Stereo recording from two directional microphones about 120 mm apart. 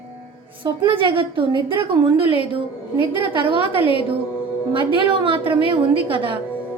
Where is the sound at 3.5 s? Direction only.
50° left (ahead or behind).